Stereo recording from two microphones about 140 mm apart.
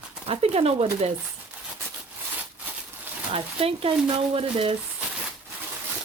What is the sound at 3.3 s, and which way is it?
Speech, 40° right (ahead or behind).